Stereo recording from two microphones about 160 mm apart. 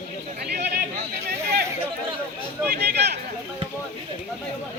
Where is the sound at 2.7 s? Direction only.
90° right.